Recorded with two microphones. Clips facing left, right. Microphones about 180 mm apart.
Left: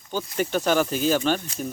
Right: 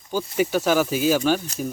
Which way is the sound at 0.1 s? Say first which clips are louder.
Right 3 dB; 10° right (ahead or behind).